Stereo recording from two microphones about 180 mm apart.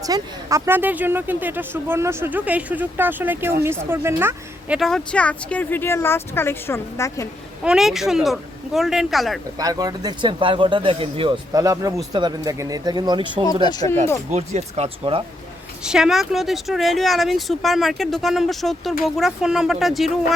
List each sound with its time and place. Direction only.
0.0 s speech: 20° right (ahead or behind)
4.8 s speech: 5° left (ahead or behind)
7.6 s speech: 5° right (ahead or behind)
9.6 s speech: 20° right (ahead or behind)
13.4 s speech: 20° left (ahead or behind)
14.3 s speech: 35° right (ahead or behind)
15.8 s speech: 5° right (ahead or behind)